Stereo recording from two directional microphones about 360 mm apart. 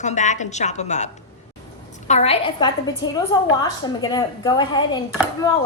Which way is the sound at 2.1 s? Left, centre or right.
Centre.